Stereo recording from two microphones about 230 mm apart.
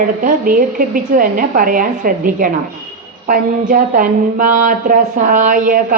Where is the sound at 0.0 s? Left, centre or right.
Right.